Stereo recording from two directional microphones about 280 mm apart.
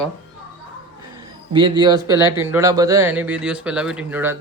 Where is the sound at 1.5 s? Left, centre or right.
Centre.